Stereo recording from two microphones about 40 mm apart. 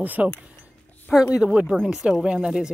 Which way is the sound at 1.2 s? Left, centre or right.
Centre.